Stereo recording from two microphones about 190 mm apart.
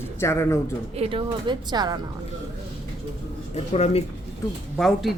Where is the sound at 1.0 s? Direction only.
30° right (ahead or behind).